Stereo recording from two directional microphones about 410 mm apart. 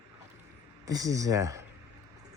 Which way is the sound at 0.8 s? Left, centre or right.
Centre.